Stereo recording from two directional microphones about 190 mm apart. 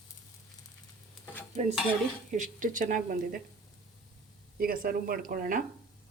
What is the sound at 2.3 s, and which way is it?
Speech, 40° right (ahead or behind).